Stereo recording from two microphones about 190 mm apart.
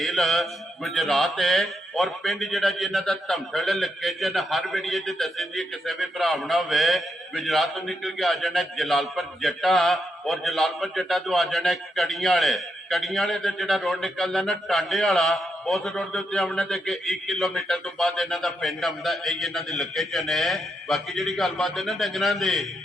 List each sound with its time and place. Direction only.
0.0 s mantra: centre (ahead or behind)